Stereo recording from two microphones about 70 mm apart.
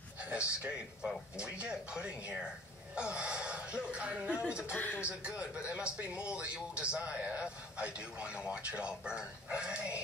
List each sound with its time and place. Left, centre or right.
0.2 s a sound: centre
1.3 s speech: centre
4.7 s a man's voice: left
5.0 s speech: centre